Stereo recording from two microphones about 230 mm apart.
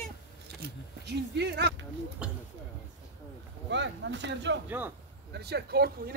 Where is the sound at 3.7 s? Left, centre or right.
Right.